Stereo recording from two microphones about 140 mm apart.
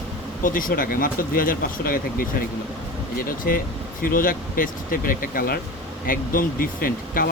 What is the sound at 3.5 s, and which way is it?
Speech, 90° left.